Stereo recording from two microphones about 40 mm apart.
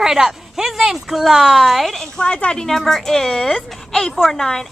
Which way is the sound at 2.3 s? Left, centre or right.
Left.